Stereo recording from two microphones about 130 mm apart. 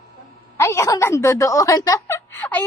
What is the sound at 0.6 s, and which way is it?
A woman's voice, 20° left (ahead or behind).